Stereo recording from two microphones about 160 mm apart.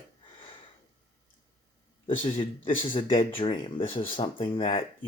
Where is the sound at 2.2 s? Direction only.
35° left (ahead or behind).